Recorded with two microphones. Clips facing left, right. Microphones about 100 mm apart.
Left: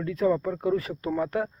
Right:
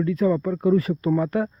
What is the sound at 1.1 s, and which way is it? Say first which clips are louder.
Speech: right 4 dB; 5° right (ahead or behind).